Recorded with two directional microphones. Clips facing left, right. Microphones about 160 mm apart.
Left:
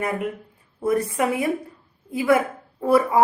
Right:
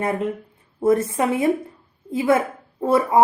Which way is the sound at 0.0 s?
25° right (ahead or behind).